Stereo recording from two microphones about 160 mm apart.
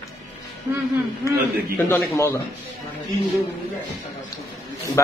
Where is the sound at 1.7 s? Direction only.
15° left (ahead or behind).